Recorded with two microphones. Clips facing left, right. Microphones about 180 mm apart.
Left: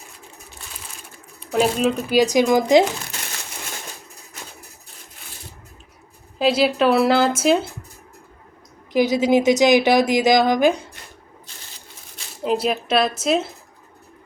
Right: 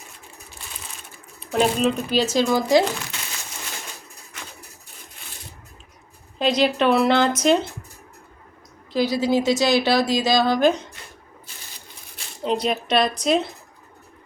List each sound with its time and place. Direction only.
1.5 s a woman's voice: centre (ahead or behind); by 2.8 s 20° left (ahead or behind)
6.4 s speech: 5° left (ahead or behind)
8.9 s a woman's voice: 20° left (ahead or behind)
12.4 s speech: 5° left (ahead or behind)